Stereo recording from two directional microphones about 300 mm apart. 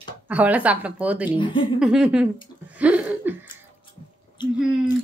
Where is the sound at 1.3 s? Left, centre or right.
Centre.